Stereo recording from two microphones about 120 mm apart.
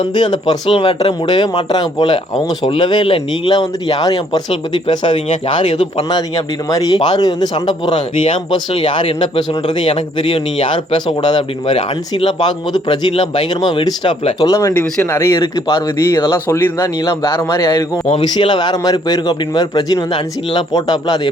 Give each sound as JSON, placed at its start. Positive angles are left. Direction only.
{"t": 0.1, "sound": "a man's voice", "side_deg": 40}
{"t": 5.5, "sound": "a man's voice", "side_deg": 45}
{"t": 6.1, "sound": "a man's voice", "side_deg": 35}